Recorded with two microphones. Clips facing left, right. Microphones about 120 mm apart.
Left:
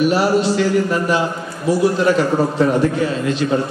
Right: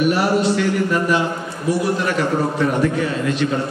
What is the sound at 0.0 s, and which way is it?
Speech, 30° left (ahead or behind).